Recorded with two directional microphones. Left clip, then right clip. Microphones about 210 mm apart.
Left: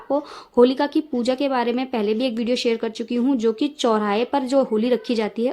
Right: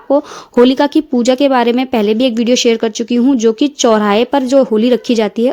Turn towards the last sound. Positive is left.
turn(degrees=-30)  # may be behind; listen again after turning